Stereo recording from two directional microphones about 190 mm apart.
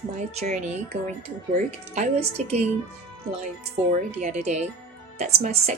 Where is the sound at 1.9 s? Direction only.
35° right (ahead or behind).